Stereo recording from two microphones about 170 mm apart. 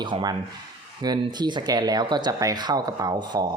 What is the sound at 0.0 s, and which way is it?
Speech, 25° right (ahead or behind).